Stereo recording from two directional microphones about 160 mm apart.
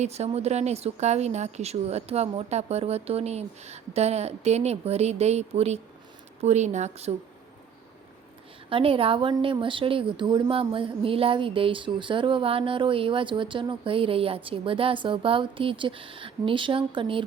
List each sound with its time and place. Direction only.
0.0 s a woman's voice: 40° right (ahead or behind)
8.7 s a woman's voice: 35° right (ahead or behind)